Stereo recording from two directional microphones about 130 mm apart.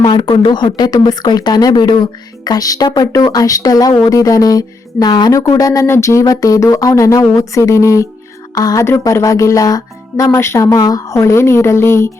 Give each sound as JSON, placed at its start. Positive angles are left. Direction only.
{"t": 0.0, "sound": "a woman's voice", "side_deg": 35}